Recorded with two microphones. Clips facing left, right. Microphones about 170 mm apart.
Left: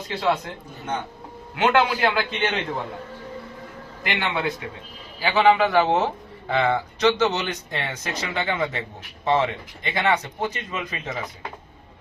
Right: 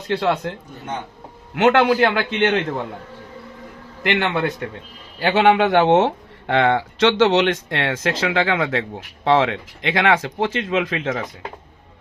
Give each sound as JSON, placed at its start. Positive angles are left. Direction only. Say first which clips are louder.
{"t": 0.1, "sound": "a man's voice", "louder": "right 3 dB", "side_deg": -65}
{"t": 1.5, "sound": "a man's voice", "louder": "right 4 dB", "side_deg": -70}
{"t": 1.9, "sound": "a man's voice", "louder": "right 6 dB", "side_deg": -55}
{"t": 4.0, "sound": "a man's voice", "louder": "right 5 dB", "side_deg": -65}